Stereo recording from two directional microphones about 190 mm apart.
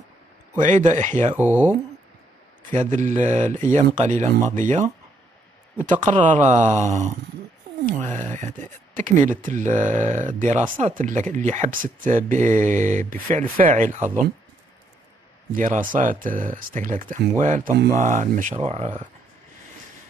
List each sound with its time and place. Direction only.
0.6 s speech: 40° right (ahead or behind)
1.3 s speech: 10° right (ahead or behind)
2.7 s speech: 40° right (ahead or behind)
3.4 s speech: 10° left (ahead or behind)
3.7 s speech: 35° right (ahead or behind)
6.3 s speech: 35° right (ahead or behind)
8.1 s speech: 10° left (ahead or behind)
8.9 s speech: 40° right (ahead or behind)
15.5 s speech: 40° right (ahead or behind)